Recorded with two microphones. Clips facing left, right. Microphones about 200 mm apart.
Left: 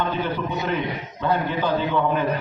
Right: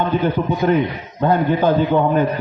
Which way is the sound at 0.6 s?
50° right (ahead or behind).